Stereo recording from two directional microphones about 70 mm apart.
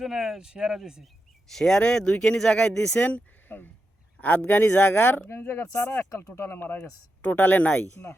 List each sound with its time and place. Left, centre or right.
0.0 s speech: centre
1.5 s speech: centre; by 6.0 s left
6.0 s speech: left